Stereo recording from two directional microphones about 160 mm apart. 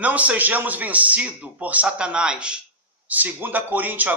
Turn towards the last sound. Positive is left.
turn(degrees=-10)  # may be behind; listen again after turning